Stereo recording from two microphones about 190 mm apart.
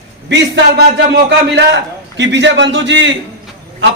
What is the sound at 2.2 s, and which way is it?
Speech, 70° right (ahead or behind).